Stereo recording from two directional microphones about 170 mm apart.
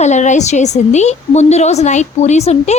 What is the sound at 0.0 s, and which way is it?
A woman's voice, 45° left (ahead or behind).